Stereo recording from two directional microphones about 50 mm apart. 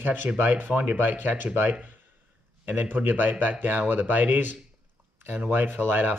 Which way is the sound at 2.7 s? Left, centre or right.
Right.